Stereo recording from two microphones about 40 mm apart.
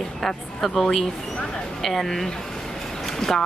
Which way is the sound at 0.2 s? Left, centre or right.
Centre.